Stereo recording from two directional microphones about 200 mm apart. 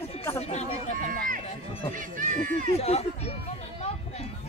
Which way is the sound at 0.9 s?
45° right (ahead or behind).